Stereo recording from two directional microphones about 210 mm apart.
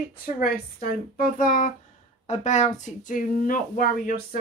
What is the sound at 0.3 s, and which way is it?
Speech, 45° left (ahead or behind).